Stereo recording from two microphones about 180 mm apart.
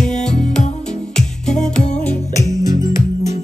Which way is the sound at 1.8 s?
40° left (ahead or behind).